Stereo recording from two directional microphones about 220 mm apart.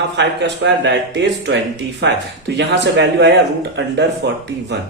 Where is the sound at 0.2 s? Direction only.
50° right (ahead or behind).